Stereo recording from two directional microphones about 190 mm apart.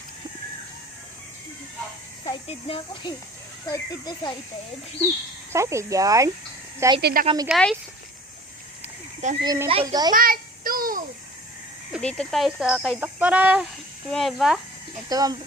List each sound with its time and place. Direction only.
2.2 s speech: 30° left (ahead or behind)
5.5 s speech: 15° right (ahead or behind)
7.0 s speech: 50° right (ahead or behind)
7.4 s speech: centre (ahead or behind)
9.4 s a child's voice: 20° right (ahead or behind)
10.2 s child singing: 50° right (ahead or behind)
11.9 s speech: centre (ahead or behind)
15.1 s a child's voice: 20° right (ahead or behind)